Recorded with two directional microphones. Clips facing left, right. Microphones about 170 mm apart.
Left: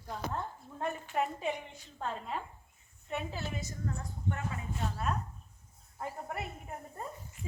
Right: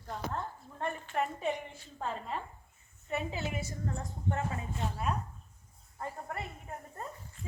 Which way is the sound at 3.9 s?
30° right (ahead or behind).